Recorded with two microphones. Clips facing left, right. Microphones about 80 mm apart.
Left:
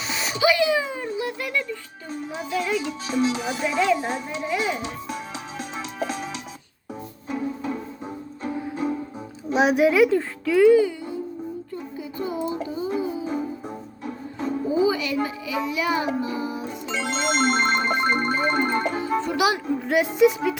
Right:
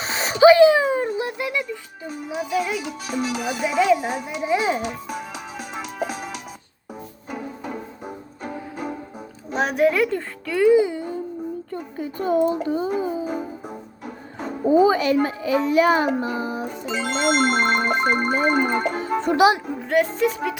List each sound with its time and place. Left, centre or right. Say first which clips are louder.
0.0 s a sound: right 8 dB; right
1.3 s speech: right 2 dB; centre
4.8 s music: right 2 dB; centre
9.5 s a woman's voice: left 1 dB; centre
10.8 s music: right 2 dB; right
11.7 s a sound: right 3 dB; right
12.6 s a child's voice: right 5 dB; right
13.0 s music: right 2 dB; right
13.2 s music: even; centre
14.7 s a child's voice: right 7 dB; right
16.2 s music: right 2 dB; right
16.9 s a woman's voice: right 3 dB; centre
19.9 s a woman's voice: left 1 dB; centre